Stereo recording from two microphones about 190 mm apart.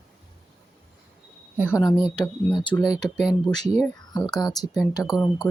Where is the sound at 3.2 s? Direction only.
Centre (ahead or behind).